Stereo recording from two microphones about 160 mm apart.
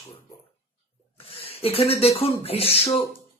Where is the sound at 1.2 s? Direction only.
40° left (ahead or behind).